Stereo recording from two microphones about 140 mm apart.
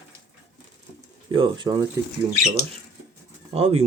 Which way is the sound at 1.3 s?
35° right (ahead or behind).